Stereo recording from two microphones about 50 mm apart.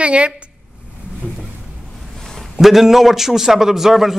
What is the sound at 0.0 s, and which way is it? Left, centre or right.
Speech, right.